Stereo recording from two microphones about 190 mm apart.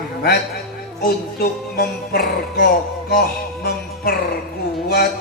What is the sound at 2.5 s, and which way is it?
Speech, 55° left (ahead or behind).